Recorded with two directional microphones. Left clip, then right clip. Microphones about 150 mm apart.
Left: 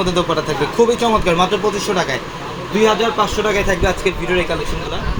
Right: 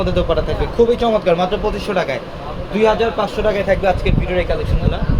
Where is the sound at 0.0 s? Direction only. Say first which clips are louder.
Even; 50° left (ahead or behind).